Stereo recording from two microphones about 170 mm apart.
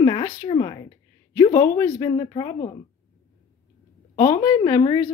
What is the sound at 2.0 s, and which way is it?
Speech, 25° left (ahead or behind).